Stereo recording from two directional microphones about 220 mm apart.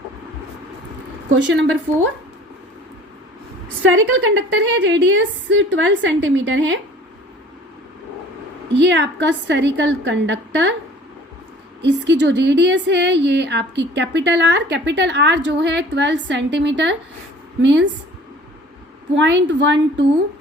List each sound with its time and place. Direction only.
3.8 s a woman's voice: 55° right (ahead or behind)
8.7 s a woman's voice: 55° right (ahead or behind)
11.8 s a woman's voice: 55° right (ahead or behind)
19.1 s a woman's voice: 55° right (ahead or behind)